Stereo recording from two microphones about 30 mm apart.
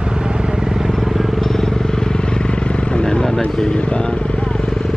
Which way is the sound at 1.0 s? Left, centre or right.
Centre.